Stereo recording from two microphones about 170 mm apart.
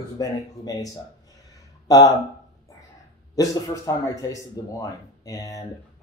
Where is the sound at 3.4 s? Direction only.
20° left (ahead or behind).